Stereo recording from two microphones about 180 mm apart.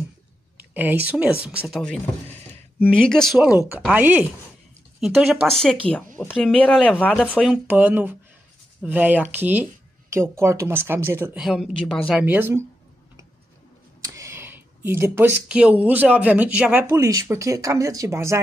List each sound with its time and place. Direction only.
0.6 s a woman's voice: 10° right (ahead or behind)
1.4 s speech: centre (ahead or behind)
3.8 s speech: 10° right (ahead or behind)
5.6 s speech: 5° left (ahead or behind)
7.3 s speech: 5° right (ahead or behind)
14.0 s a sound: 15° right (ahead or behind)
15.4 s speech: 5° right (ahead or behind)